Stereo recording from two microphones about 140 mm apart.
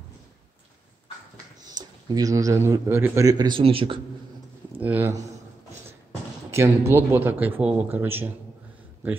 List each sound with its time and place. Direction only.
1.7 s speech: 30° right (ahead or behind)
4.8 s speech: 10° right (ahead or behind)
6.5 s speech: 20° right (ahead or behind)